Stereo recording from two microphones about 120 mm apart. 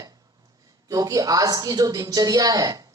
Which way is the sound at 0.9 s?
30° right (ahead or behind).